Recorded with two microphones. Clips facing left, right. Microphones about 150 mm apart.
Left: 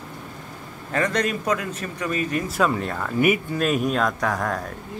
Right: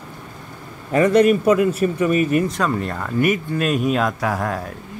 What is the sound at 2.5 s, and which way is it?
Speech, 5° left (ahead or behind).